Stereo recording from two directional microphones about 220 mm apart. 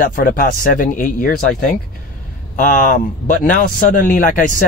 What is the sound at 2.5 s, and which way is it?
Speech, 35° left (ahead or behind).